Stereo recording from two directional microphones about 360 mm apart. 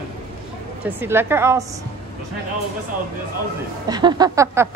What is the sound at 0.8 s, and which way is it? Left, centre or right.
Speech, centre.